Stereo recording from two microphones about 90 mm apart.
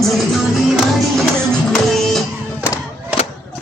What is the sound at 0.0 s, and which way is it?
Music, centre (ahead or behind).